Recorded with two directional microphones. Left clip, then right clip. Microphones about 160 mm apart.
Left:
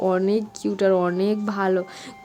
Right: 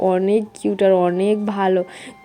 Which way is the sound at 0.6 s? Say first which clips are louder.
Right 4 dB; 5° right (ahead or behind).